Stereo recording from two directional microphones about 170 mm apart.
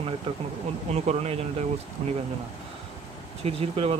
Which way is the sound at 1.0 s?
40° right (ahead or behind).